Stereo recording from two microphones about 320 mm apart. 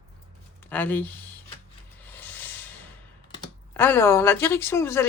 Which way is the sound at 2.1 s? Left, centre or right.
Centre.